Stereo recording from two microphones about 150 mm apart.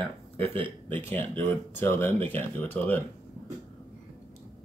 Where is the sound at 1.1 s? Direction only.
15° left (ahead or behind).